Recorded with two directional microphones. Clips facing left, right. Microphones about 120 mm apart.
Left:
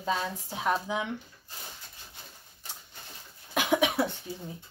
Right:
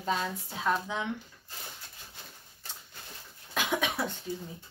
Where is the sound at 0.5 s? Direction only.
15° left (ahead or behind).